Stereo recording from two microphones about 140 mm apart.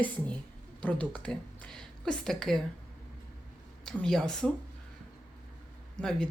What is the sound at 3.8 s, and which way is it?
Speech, 5° left (ahead or behind).